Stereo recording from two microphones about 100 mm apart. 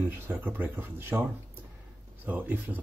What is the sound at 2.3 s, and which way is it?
Speech, 15° right (ahead or behind).